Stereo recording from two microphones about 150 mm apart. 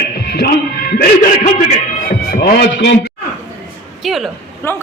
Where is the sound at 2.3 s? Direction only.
90° left.